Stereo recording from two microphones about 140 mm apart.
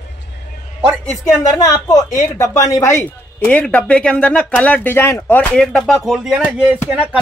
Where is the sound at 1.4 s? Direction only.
25° left (ahead or behind).